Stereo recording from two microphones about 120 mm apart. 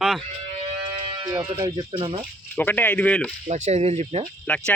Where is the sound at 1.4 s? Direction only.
20° right (ahead or behind).